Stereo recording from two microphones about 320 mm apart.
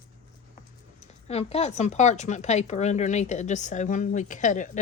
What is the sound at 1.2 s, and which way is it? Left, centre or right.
Speech, centre.